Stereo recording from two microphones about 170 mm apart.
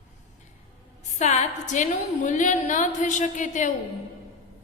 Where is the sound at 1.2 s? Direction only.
40° left (ahead or behind).